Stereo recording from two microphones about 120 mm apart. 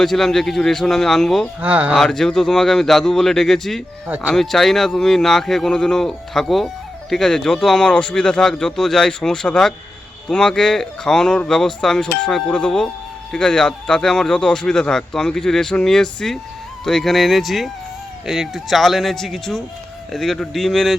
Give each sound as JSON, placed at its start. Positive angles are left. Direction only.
{"t": 0.0, "sound": "speech", "side_deg": 0}
{"t": 1.6, "sound": "speech", "side_deg": -10}
{"t": 2.0, "sound": "speech", "side_deg": 5}
{"t": 4.0, "sound": "speech", "side_deg": -15}
{"t": 4.4, "sound": "speech", "side_deg": 0}